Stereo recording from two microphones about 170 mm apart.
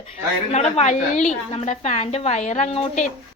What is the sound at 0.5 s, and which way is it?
A woman's voice, 40° left (ahead or behind).